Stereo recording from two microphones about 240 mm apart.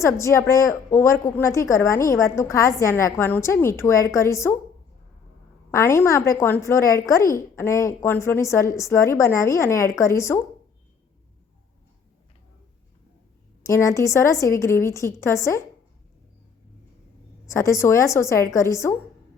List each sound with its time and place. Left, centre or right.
0.0 s a woman's voice: centre
5.7 s a woman's voice: centre
13.6 s a woman's voice: centre
17.4 s a woman's voice: centre